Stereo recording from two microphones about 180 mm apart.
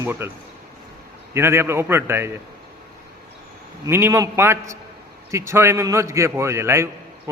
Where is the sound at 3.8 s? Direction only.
15° right (ahead or behind).